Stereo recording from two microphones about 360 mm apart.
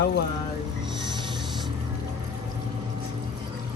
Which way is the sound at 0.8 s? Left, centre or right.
Centre.